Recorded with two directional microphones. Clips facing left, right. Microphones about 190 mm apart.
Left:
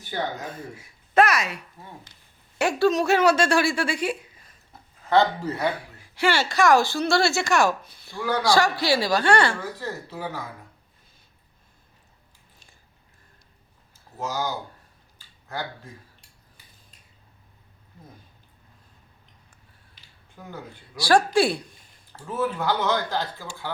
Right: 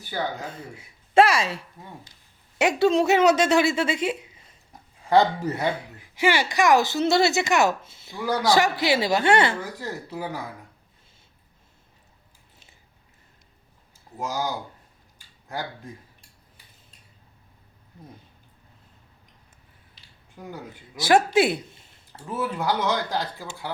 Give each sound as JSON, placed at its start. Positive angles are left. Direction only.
{"t": 0.4, "sound": "speech", "side_deg": -25}
{"t": 14.2, "sound": "speech", "side_deg": -10}
{"t": 15.2, "sound": "a sound", "side_deg": -15}
{"t": 20.5, "sound": "speech", "side_deg": -20}
{"t": 22.4, "sound": "speech", "side_deg": -10}